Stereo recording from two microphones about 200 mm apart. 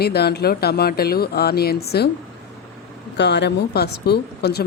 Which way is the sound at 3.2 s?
60° left (ahead or behind).